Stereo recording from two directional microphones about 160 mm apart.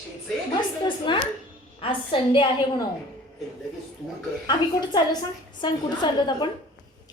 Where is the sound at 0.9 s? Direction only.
30° left (ahead or behind).